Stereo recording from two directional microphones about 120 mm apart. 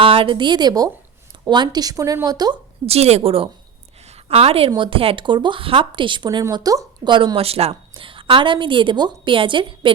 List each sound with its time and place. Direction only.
0.0 s speech: 45° right (ahead or behind)
2.8 s a woman's voice: 60° right (ahead or behind); by 9.9 s 45° right (ahead or behind)